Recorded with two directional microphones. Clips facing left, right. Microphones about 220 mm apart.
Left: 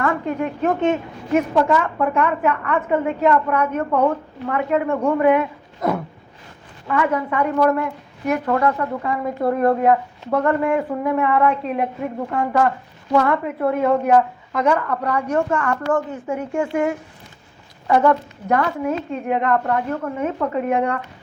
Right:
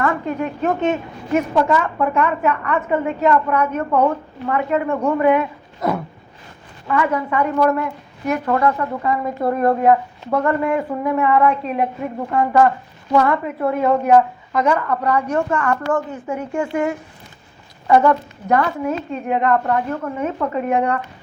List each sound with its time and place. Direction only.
0.0 s a woman's voice: 55° left (ahead or behind)